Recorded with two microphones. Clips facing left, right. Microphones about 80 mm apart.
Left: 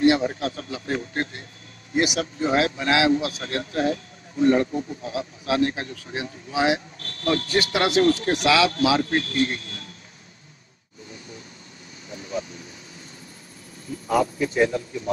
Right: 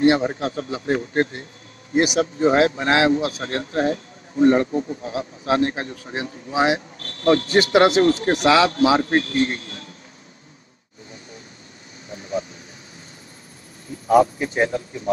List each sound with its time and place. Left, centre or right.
0.0 s a man's voice: right
14.0 s a man's voice: right